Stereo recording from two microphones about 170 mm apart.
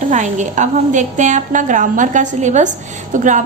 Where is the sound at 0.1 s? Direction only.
45° right (ahead or behind).